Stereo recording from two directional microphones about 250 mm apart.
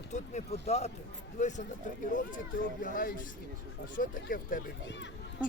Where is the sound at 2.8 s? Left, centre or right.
Left.